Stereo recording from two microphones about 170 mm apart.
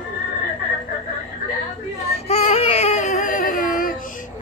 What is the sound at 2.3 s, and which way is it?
Baby cry, 35° left (ahead or behind).